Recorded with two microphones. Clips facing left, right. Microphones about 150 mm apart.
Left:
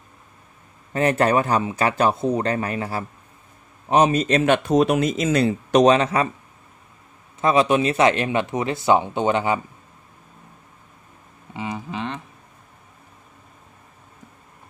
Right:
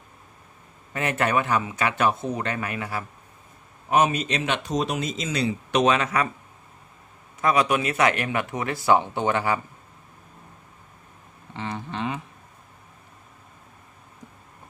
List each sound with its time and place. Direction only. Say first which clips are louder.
0.9 s speech: left 6 dB; 35° left (ahead or behind)
7.4 s speech: left 4 dB; 25° left (ahead or behind)
11.5 s a sound: left 3 dB; 10° left (ahead or behind)